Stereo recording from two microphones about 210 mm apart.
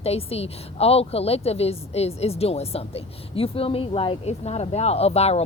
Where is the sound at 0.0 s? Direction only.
30° left (ahead or behind).